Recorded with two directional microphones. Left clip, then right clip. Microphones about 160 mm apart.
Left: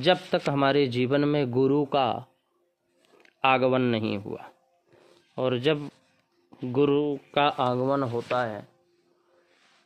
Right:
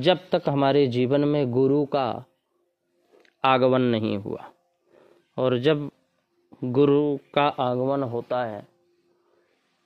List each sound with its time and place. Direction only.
0.0 s a man's voice: 30° right (ahead or behind)